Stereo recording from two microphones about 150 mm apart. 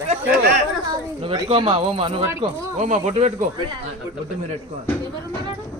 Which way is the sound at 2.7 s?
50° right (ahead or behind).